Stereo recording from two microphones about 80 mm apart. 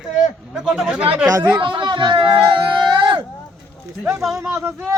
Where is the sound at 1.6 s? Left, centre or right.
Right.